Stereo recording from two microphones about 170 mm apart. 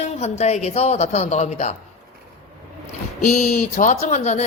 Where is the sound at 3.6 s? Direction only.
55° left (ahead or behind).